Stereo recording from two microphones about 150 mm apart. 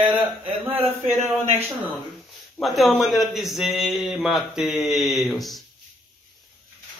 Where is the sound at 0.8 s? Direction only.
45° right (ahead or behind).